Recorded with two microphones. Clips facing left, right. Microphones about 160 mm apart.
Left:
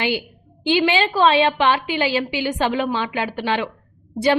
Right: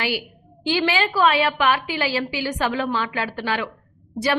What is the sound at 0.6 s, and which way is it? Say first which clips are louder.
A woman's voice: left 3 dB; 20° left (ahead or behind).